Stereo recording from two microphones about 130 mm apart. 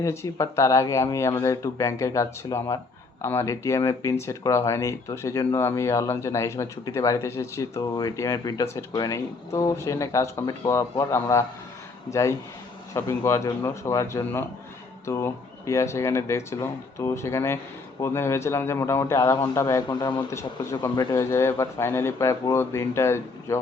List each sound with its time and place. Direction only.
0.0 s speech: 20° left (ahead or behind)
12.9 s speech: 20° left (ahead or behind)
20.3 s speech: 20° left (ahead or behind)
20.9 s speech: 30° left (ahead or behind)
21.2 s speech: 20° left (ahead or behind)